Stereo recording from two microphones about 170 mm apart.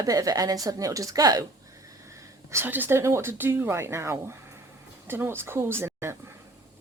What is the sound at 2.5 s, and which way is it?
A woman's voice, 15° right (ahead or behind).